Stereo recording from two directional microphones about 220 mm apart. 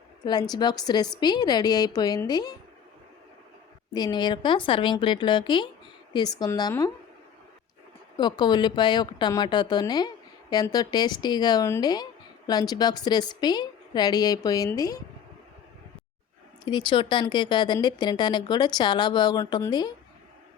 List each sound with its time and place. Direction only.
0.3 s a woman's voice: 20° left (ahead or behind)
3.9 s a woman's voice: 20° left (ahead or behind)
8.1 s a woman's voice: 20° left (ahead or behind)
16.6 s speech: 20° left (ahead or behind)